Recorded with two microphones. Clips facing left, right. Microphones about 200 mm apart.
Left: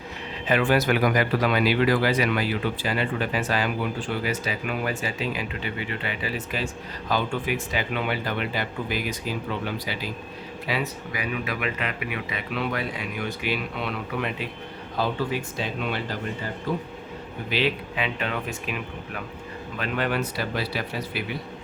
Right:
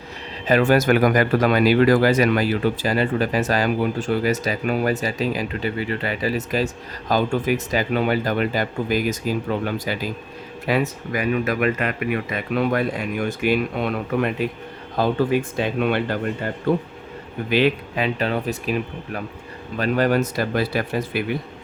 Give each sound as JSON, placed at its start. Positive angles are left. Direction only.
{"t": 0.4, "sound": "speech", "side_deg": -40}
{"t": 17.5, "sound": "speech", "side_deg": -45}